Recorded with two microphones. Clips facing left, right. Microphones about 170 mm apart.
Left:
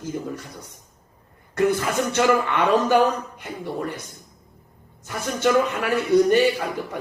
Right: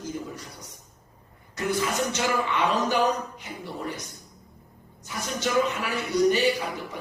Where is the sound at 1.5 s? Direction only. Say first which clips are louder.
Left 6 dB; 55° left (ahead or behind).